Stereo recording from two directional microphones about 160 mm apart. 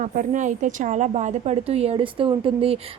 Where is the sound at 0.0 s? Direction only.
50° right (ahead or behind).